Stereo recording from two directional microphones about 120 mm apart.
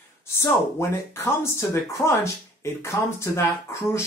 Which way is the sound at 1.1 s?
25° left (ahead or behind).